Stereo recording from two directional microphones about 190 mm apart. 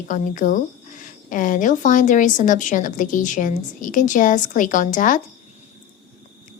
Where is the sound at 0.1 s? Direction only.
45° left (ahead or behind).